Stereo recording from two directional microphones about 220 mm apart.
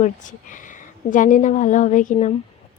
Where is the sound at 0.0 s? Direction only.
35° left (ahead or behind).